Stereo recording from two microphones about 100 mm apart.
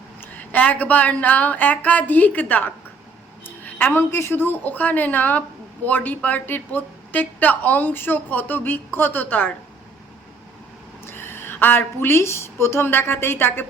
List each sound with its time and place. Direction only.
0.2 s a woman's voice: 15° left (ahead or behind)
11.0 s a woman's voice: 25° left (ahead or behind)